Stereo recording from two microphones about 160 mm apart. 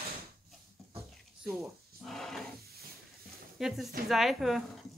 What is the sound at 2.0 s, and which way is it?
Speech, centre (ahead or behind).